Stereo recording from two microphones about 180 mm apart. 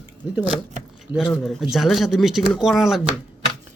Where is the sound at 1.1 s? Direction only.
5° left (ahead or behind).